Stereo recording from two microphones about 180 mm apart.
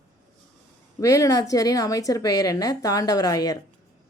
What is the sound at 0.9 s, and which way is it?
A woman's voice, 20° left (ahead or behind).